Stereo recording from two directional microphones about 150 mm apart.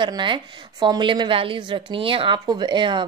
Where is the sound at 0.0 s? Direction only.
30° right (ahead or behind).